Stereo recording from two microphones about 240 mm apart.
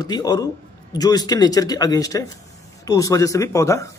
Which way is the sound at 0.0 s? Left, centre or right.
Centre.